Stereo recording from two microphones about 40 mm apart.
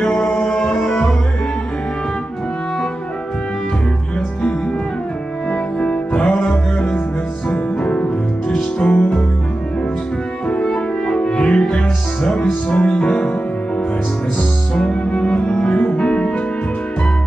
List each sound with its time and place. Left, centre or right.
0.0 s music: left
5.5 s music: left
10.5 s music: left
14.8 s music: left